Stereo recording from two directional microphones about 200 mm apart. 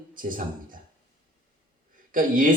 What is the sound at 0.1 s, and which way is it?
Speech, 45° right (ahead or behind).